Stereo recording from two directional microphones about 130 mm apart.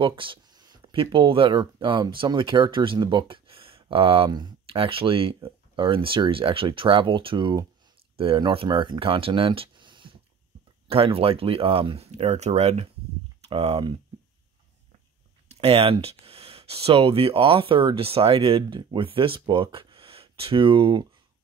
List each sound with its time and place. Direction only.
0.0 s speech: 40° right (ahead or behind)
4.6 s speech: 45° right (ahead or behind)
12.1 s speech: 60° right (ahead or behind)
15.4 s speech: 50° right (ahead or behind)